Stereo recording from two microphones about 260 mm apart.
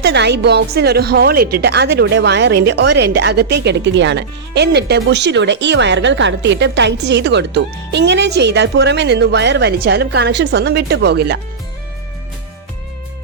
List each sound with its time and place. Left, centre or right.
0.0 s a woman's voice: right